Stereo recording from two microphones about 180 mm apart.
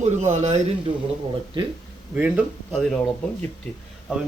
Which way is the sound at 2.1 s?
5° right (ahead or behind).